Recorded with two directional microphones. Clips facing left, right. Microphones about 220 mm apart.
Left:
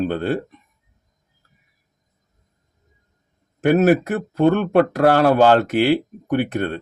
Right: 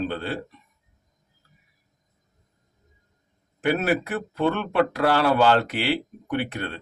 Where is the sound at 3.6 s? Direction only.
45° left (ahead or behind).